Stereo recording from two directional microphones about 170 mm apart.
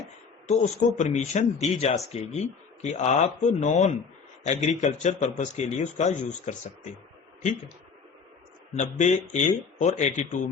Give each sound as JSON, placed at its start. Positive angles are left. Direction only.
{"t": 0.4, "sound": "speech", "side_deg": 45}
{"t": 8.8, "sound": "speech", "side_deg": 45}